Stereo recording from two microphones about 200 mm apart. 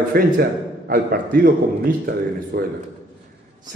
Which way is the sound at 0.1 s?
50° right (ahead or behind).